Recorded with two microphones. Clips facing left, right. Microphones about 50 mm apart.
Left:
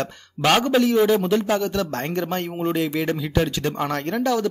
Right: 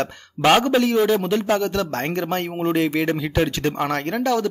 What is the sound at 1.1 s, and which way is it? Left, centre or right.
Speech, right.